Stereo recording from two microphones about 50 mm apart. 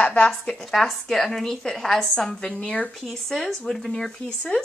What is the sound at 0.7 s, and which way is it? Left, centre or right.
Speech, centre.